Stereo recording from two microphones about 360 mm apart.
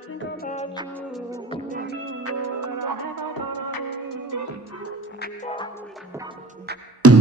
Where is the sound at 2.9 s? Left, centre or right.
Left.